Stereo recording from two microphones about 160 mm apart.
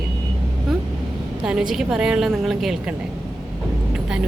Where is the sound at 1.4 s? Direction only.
5° right (ahead or behind).